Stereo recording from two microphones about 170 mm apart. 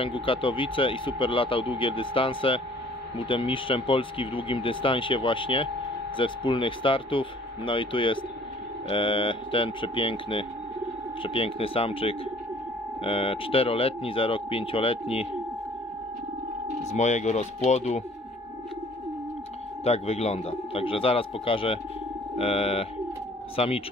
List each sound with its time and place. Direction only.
0.0 s speech: 30° left (ahead or behind)
16.9 s speech: 45° left (ahead or behind)
19.8 s speech: 40° left (ahead or behind)